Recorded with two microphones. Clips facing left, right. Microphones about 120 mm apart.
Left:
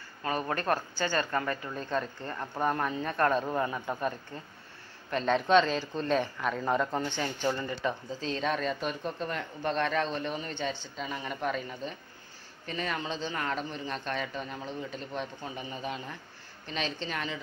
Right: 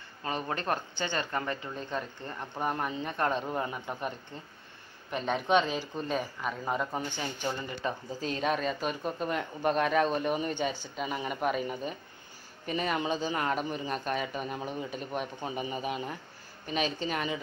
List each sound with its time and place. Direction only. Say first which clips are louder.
0.2 s speech: left 2 dB; 25° right (ahead or behind)
5.1 s a man's voice: left 3 dB; 15° right (ahead or behind)